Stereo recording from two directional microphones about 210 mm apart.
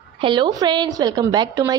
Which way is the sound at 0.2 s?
20° right (ahead or behind).